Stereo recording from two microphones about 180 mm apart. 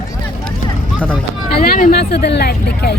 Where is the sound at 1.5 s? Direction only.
55° left (ahead or behind).